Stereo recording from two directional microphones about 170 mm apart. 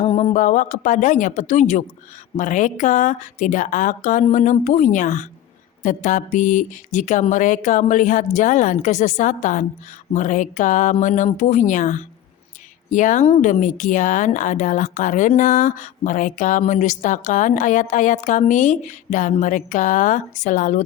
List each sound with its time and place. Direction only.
0.0 s speech: 35° left (ahead or behind)